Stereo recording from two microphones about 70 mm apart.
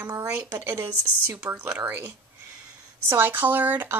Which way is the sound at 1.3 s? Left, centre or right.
Centre.